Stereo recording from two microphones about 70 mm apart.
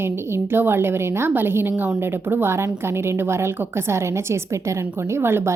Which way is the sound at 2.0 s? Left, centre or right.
Right.